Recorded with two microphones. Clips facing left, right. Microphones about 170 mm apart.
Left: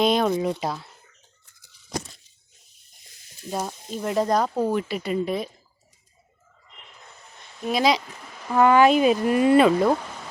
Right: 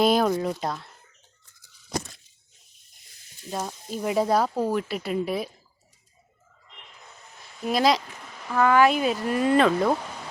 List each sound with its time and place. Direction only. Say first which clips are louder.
0.0 s speech: even; 5° right (ahead or behind)
3.5 s speech: left 2 dB; 5° left (ahead or behind)
3.9 s speech: even; 5° right (ahead or behind)
7.3 s a sound: even; centre (ahead or behind)
8.5 s speech: left 3 dB; 20° left (ahead or behind)